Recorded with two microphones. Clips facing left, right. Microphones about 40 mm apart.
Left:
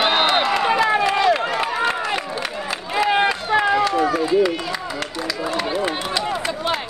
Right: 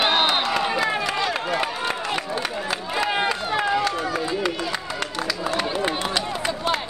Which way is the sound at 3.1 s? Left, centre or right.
Centre.